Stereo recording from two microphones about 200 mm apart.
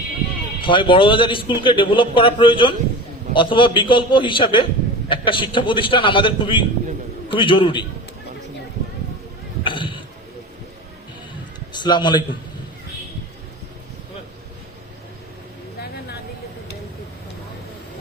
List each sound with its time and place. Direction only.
0.6 s a man's voice: 25° left (ahead or behind)
9.6 s a sound: 25° left (ahead or behind)
11.7 s a man's voice: 20° left (ahead or behind)